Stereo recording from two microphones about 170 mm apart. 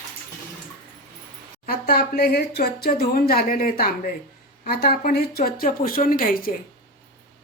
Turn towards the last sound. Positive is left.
turn(degrees=60)  # may be behind; listen again after turning